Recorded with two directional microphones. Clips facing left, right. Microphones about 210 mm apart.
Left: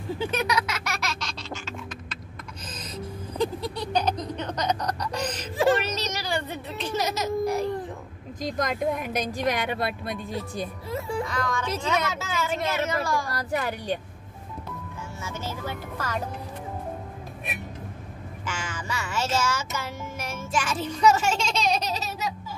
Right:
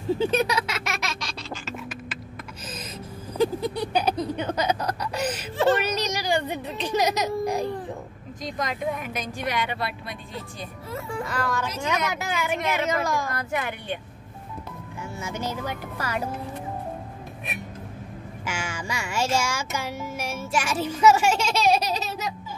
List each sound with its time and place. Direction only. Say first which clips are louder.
0.2 s speech: even; 30° right (ahead or behind)
3.3 s a sound: right 4 dB; 10° right (ahead or behind)
9.2 s a woman's voice: left 1 dB; 40° left (ahead or behind)
11.2 s speech: right 1 dB; 5° right (ahead or behind)
13.3 s a woman's voice: left 1 dB; 35° left (ahead or behind)
15.1 s speech: right 4 dB; 15° right (ahead or behind)
18.4 s music: right 2 dB; 10° right (ahead or behind)